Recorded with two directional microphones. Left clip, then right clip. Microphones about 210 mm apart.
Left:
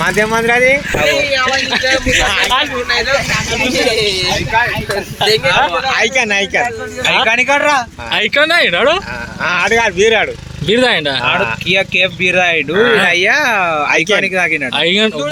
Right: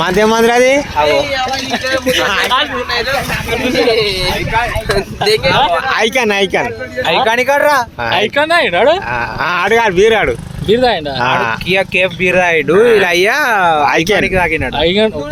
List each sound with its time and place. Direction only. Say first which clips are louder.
0.0 s speech: right 3 dB; 45° right (ahead or behind)
5.3 s speech: right 1 dB; 40° right (ahead or behind)
7.3 s speech: right 2 dB; 30° right (ahead or behind)
8.4 s speech: left 1 dB; 10° left (ahead or behind)
9.4 s speech: even; 50° right (ahead or behind)
10.7 s speech: even; 10° left (ahead or behind)
11.7 s speech: even; 25° right (ahead or behind)
13.0 s speech: even; 50° right (ahead or behind)
14.3 s speech: right 1 dB; 20° right (ahead or behind)
14.8 s speech: right 1 dB; 5° left (ahead or behind)